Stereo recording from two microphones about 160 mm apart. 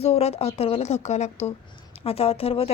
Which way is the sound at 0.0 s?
40° left (ahead or behind).